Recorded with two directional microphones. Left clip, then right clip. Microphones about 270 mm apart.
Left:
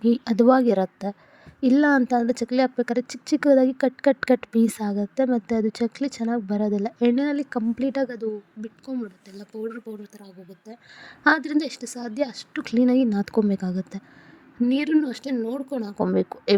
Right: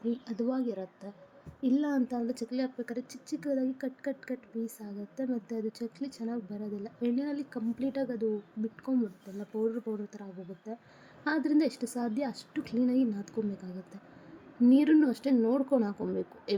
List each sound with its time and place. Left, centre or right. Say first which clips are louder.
0.0 s speech: left 15 dB; left
9.5 s speech: even; centre
11.0 s speech: left 12 dB; left